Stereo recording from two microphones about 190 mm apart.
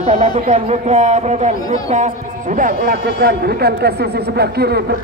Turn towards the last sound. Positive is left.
turn(degrees=-55)  # may be behind; listen again after turning